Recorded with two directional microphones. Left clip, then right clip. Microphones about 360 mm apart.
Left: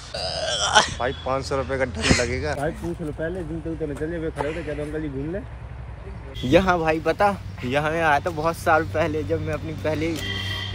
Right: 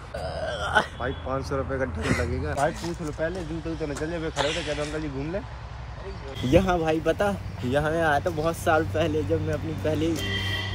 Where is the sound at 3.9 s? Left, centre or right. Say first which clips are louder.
Left 1 dB; centre.